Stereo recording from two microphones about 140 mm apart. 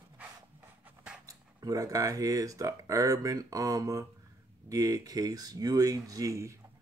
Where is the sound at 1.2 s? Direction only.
25° right (ahead or behind).